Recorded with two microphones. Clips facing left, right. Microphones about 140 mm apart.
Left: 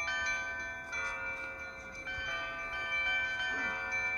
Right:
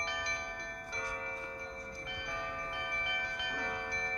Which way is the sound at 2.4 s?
40° right (ahead or behind).